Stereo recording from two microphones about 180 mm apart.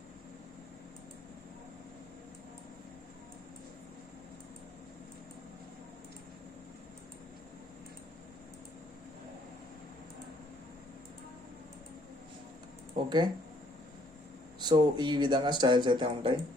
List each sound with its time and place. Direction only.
13.1 s speech: 25° right (ahead or behind)
14.6 s speech: 25° right (ahead or behind)